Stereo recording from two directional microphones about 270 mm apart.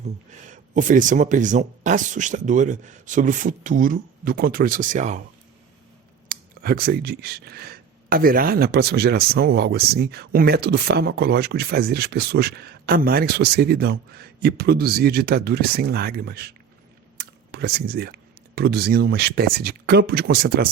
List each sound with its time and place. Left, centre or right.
0.4 s speech: right
6.2 s speech: right